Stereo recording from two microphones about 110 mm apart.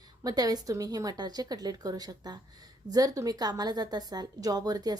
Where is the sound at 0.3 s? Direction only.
35° right (ahead or behind).